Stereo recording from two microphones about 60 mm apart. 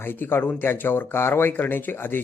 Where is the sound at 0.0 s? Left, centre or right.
Left.